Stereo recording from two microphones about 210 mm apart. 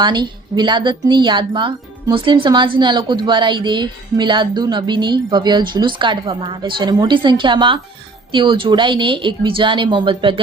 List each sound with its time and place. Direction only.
0.0 s speech: 20° right (ahead or behind)